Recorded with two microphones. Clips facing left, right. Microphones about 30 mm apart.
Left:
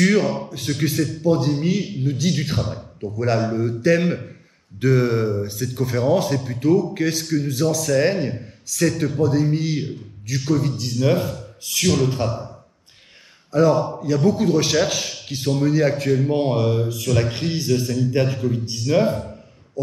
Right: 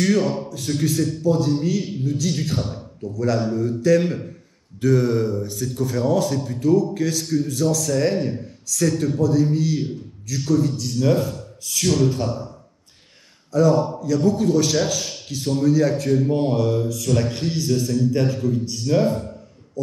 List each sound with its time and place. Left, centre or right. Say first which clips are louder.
0.0 s speech: left 2 dB; left
13.5 s speech: left 1 dB; left